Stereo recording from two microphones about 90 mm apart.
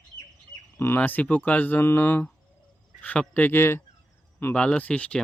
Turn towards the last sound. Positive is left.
turn(degrees=10)  # may be behind; listen again after turning